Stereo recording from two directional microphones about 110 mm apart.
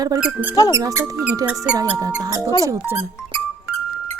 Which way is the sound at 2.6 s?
25° right (ahead or behind).